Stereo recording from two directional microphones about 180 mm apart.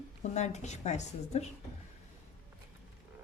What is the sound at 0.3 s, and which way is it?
A woman's voice, 40° left (ahead or behind).